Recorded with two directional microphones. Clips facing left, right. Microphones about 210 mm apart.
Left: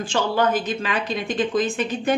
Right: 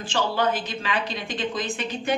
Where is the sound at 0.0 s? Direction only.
45° left (ahead or behind).